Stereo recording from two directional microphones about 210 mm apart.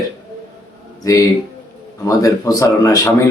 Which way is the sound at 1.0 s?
15° left (ahead or behind).